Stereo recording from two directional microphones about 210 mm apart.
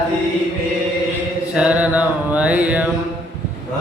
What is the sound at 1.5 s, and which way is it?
Music, 5° right (ahead or behind).